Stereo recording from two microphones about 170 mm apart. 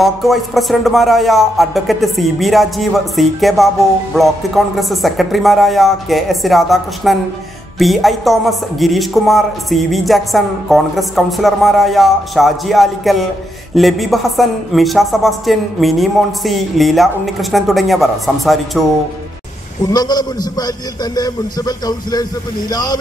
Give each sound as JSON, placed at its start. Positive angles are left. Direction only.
{"t": 0.0, "sound": "speech", "side_deg": 0}
{"t": 19.8, "sound": "a man's voice", "side_deg": 25}